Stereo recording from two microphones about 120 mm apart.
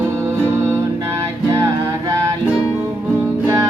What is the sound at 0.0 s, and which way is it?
Music, 25° right (ahead or behind).